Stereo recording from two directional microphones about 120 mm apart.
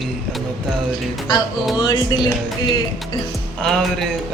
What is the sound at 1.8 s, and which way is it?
Music, 40° left (ahead or behind).